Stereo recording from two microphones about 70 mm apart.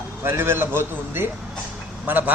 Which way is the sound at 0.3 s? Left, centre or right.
Right.